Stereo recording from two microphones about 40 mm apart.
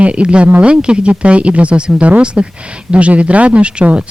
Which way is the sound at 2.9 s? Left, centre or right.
Right.